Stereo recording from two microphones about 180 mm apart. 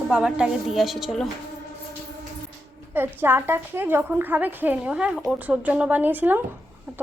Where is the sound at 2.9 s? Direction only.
10° right (ahead or behind).